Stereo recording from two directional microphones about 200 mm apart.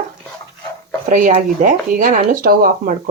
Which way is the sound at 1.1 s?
40° right (ahead or behind).